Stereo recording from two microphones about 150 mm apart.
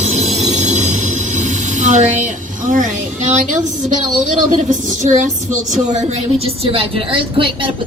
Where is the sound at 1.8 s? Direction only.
50° right (ahead or behind).